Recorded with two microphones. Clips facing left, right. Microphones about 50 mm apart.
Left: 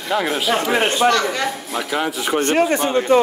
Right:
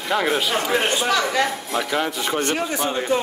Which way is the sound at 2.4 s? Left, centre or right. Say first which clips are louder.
Left 9 dB; left.